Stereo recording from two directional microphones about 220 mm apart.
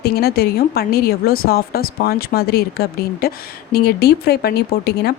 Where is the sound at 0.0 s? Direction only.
45° left (ahead or behind).